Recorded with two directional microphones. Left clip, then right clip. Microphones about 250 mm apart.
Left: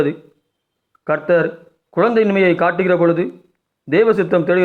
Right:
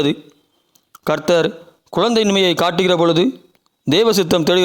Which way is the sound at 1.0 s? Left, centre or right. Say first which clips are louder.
Even; right.